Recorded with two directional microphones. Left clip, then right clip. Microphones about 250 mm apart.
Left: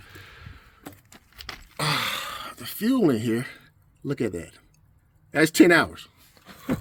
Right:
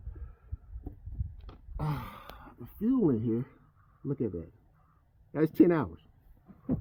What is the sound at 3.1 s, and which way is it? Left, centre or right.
Speech, centre.